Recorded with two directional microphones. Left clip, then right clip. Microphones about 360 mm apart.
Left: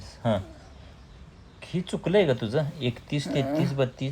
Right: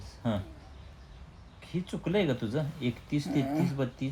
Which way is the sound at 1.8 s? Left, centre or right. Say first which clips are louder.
Left 7 dB; left.